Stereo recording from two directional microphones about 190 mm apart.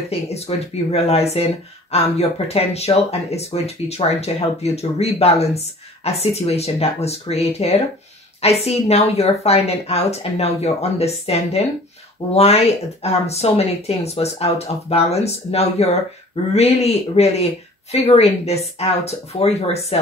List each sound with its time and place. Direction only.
0.1 s speech: 35° left (ahead or behind)